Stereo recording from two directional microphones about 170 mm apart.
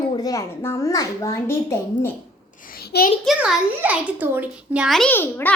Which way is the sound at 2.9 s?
70° left (ahead or behind).